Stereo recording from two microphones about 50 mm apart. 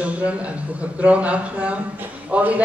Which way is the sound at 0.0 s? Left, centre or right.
Right.